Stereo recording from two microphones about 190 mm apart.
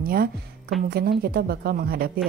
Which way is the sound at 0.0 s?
50° right (ahead or behind).